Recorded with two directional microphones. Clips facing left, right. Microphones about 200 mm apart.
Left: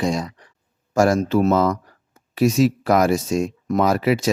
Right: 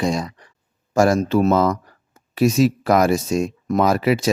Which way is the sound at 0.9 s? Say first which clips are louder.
Right 1 dB; 30° right (ahead or behind).